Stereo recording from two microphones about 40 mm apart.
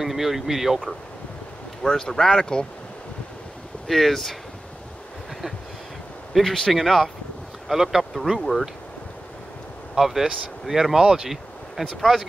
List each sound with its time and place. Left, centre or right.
0.0 s speech: centre
1.9 s speech: left
3.8 s speech: centre
6.3 s speech: centre
7.6 s speech: centre
8.0 s speech: centre
9.9 s speech: centre